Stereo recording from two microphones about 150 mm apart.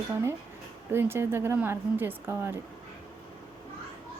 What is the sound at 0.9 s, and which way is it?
A woman's voice, 15° right (ahead or behind).